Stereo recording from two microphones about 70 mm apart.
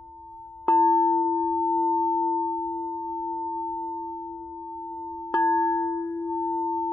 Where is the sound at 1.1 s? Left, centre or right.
Left.